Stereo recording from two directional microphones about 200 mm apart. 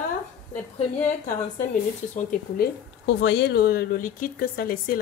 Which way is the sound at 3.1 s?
60° left (ahead or behind).